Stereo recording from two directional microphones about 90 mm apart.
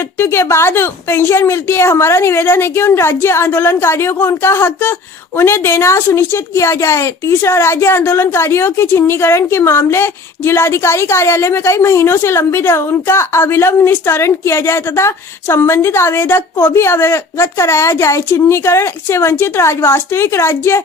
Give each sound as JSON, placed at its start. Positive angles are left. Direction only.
{"t": 0.2, "sound": "a woman's voice", "side_deg": 30}